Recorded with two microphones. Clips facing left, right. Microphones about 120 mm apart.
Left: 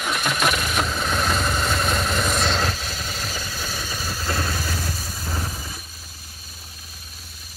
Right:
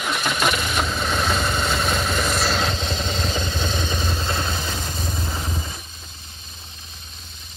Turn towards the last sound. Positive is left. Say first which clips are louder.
# right 1 dB
turn(degrees=5)  # may be behind; listen again after turning